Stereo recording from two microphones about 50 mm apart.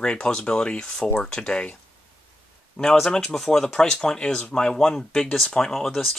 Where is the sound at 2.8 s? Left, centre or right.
Centre.